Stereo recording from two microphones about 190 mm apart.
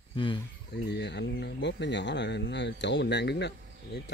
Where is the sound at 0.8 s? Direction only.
65° left (ahead or behind).